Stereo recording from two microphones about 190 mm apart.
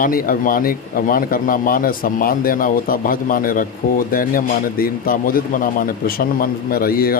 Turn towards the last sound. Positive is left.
turn(degrees=50)  # may be behind; listen again after turning